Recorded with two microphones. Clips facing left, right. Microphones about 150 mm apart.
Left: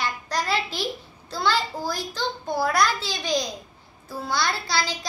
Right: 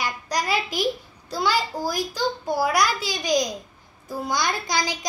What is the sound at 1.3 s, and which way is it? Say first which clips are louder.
A child's voice: right 1 dB; 10° right (ahead or behind).